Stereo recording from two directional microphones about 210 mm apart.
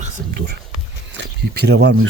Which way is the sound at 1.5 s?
50° right (ahead or behind).